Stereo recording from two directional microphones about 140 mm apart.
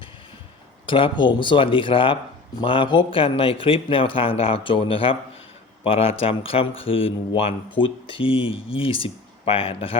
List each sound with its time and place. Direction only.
0.9 s speech: 40° left (ahead or behind)